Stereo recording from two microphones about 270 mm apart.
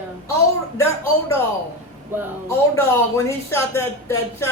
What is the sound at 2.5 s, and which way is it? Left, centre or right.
Speech, centre.